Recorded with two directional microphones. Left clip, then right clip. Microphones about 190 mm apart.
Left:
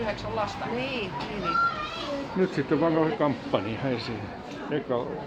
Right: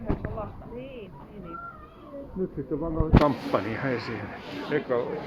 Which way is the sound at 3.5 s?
25° left (ahead or behind).